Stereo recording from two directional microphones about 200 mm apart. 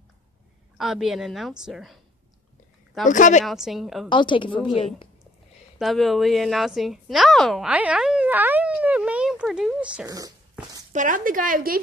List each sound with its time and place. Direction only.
0.7 s a woman's voice: centre (ahead or behind)
3.1 s speech: 40° left (ahead or behind)
3.4 s a woman's voice: centre (ahead or behind)
4.1 s speech: 25° left (ahead or behind)
5.8 s a woman's voice: centre (ahead or behind)
10.0 s speech: 20° right (ahead or behind)
10.9 s speech: 40° right (ahead or behind)